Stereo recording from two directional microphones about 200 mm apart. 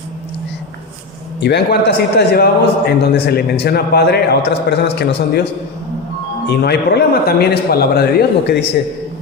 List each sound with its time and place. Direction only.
1.4 s a man's voice: 55° left (ahead or behind)
6.4 s a man's voice: 55° left (ahead or behind)